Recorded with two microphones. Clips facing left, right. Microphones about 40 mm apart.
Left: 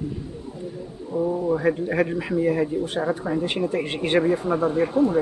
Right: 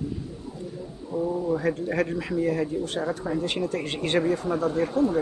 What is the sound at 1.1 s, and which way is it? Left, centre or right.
A man's voice, left.